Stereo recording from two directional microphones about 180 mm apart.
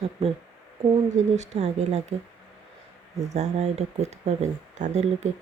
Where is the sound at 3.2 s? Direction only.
40° right (ahead or behind).